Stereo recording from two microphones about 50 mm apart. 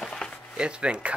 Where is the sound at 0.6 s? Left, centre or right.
Centre.